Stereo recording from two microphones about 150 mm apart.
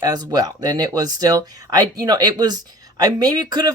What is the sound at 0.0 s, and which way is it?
Speech, 25° right (ahead or behind).